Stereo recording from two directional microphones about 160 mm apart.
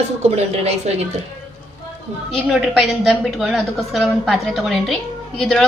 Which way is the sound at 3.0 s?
Centre (ahead or behind).